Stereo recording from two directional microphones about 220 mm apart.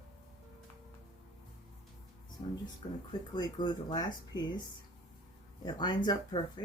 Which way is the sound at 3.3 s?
20° left (ahead or behind).